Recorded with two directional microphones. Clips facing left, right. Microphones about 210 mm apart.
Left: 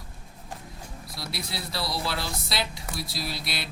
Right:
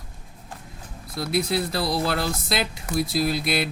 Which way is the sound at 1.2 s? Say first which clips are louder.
Right 13 dB; 50° right (ahead or behind).